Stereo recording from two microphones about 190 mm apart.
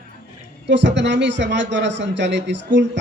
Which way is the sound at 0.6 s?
70° right (ahead or behind).